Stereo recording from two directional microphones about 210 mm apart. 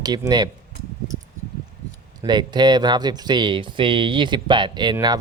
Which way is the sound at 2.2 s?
20° right (ahead or behind).